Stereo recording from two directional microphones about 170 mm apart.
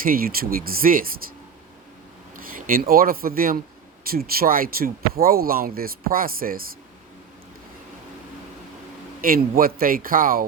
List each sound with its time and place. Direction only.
0.0 s speech: 60° right (ahead or behind)
2.3 s speech: 55° right (ahead or behind)
9.2 s speech: 60° right (ahead or behind)